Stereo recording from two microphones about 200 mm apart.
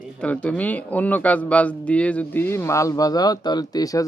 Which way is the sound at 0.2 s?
5° left (ahead or behind).